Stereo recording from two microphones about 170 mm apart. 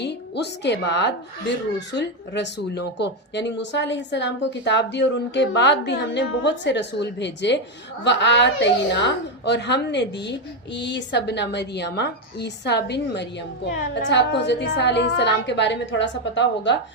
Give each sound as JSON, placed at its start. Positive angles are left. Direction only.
{"t": 0.0, "sound": "a woman's voice", "side_deg": 85}